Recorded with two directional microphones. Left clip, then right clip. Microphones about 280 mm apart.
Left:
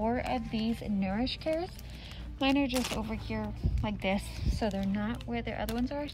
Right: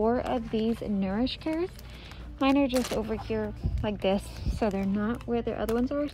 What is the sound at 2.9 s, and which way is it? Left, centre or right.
Speech, left.